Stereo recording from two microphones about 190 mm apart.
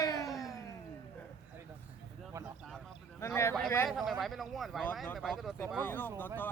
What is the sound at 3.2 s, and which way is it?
Speech, 15° left (ahead or behind).